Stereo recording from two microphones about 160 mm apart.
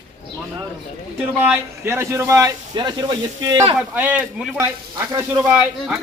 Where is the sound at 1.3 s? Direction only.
10° right (ahead or behind).